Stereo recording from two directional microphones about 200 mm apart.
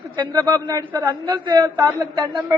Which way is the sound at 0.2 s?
20° right (ahead or behind).